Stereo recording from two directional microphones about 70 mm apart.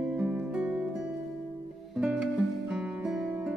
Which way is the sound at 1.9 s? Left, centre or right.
Centre.